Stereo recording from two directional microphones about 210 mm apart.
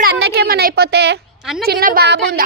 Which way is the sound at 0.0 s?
50° right (ahead or behind).